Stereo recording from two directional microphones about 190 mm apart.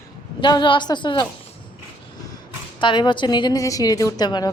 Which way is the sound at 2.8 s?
25° left (ahead or behind).